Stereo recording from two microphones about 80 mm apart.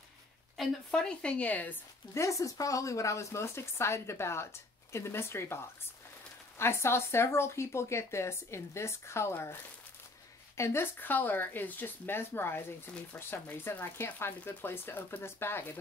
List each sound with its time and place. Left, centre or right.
0.6 s a woman's voice: centre
2.1 s speech: left
6.6 s speech: left